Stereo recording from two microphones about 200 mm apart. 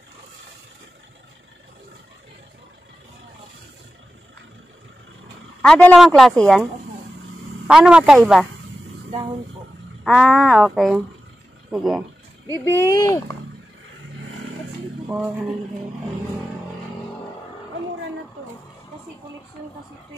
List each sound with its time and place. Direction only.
5.6 s speech: 5° left (ahead or behind)
10.0 s speech: centre (ahead or behind)
12.4 s speech: 15° left (ahead or behind)